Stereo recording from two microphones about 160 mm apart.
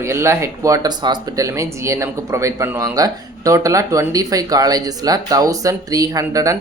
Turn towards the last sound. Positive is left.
turn(degrees=-20)  # may be behind; listen again after turning